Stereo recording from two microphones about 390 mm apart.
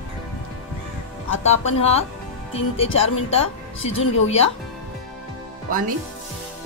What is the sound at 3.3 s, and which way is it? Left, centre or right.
Speech, centre.